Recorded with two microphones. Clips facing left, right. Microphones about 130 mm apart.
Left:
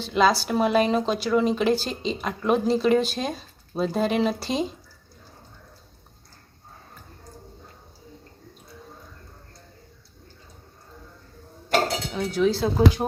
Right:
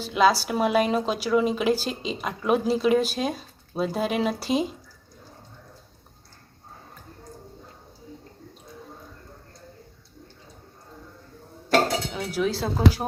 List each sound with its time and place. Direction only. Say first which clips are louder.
0.0 s a woman's voice: even; 10° right (ahead or behind)
12.1 s speech: left 4 dB; 5° right (ahead or behind)